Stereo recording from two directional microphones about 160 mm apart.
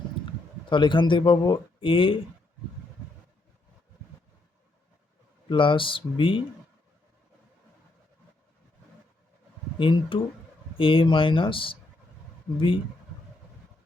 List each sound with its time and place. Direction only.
0.7 s speech: 30° left (ahead or behind)
5.5 s speech: 30° left (ahead or behind)
9.7 s speech: 30° left (ahead or behind)